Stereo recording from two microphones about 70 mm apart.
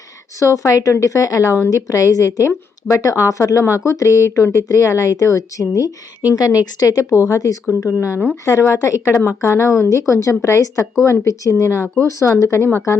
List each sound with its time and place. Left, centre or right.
0.3 s speech: left
1.7 s a woman's voice: left
6.3 s a woman's voice: left
7.1 s speech: left
7.9 s speech: left